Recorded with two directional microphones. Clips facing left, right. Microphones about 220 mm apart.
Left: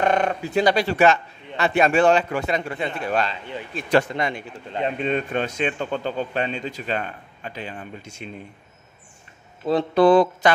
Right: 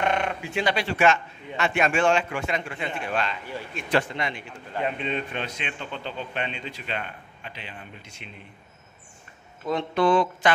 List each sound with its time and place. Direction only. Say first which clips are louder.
0.0 s a man's voice: left 5 dB; 40° left (ahead or behind)
9.7 s a man's voice: left 6 dB; 35° left (ahead or behind)